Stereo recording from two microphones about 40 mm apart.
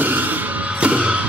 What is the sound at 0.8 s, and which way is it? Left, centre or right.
Music, right.